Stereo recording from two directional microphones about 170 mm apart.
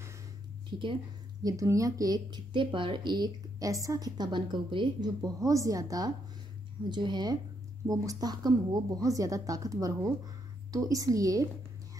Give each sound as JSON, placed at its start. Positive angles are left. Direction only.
{"t": 0.7, "sound": "a woman's voice", "side_deg": -30}